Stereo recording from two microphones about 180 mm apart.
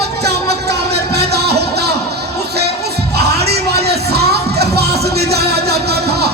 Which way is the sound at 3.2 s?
65° right (ahead or behind).